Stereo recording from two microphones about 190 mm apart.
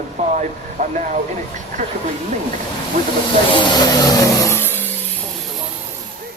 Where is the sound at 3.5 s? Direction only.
20° left (ahead or behind).